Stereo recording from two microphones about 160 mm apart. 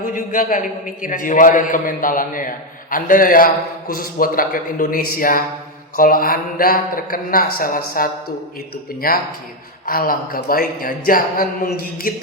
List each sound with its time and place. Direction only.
0.1 s a man's voice: 55° left (ahead or behind)